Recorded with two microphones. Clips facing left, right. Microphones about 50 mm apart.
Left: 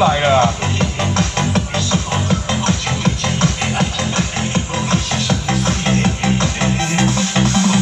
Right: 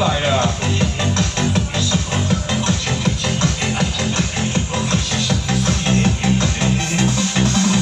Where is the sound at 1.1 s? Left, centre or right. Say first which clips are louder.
Left 3 dB; left.